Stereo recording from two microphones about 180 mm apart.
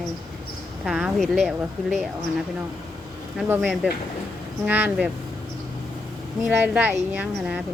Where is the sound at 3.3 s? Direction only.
Centre (ahead or behind).